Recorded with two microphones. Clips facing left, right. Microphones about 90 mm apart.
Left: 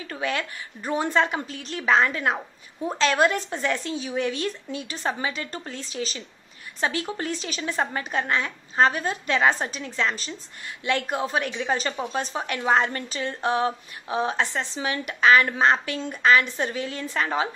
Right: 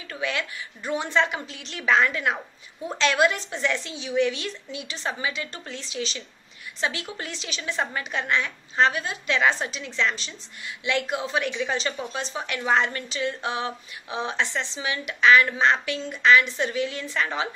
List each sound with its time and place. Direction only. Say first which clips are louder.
0.1 s a woman's voice: left 1 dB; 40° left (ahead or behind)
12.2 s a woman's voice: left 2 dB; 45° left (ahead or behind)